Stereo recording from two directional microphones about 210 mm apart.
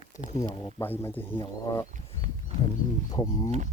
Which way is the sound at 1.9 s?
30° right (ahead or behind).